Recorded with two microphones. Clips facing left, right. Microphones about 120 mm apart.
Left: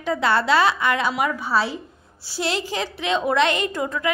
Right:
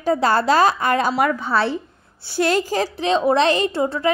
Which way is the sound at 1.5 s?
60° right (ahead or behind).